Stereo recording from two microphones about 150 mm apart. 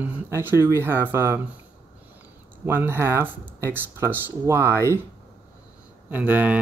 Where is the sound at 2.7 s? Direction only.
15° right (ahead or behind).